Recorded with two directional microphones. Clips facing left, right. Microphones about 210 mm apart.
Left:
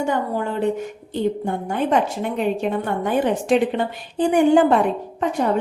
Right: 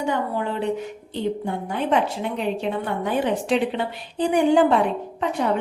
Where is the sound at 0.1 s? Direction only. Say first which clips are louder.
Left 2 dB; 45° left (ahead or behind).